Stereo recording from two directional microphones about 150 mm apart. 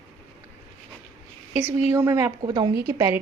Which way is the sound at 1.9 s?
20° right (ahead or behind).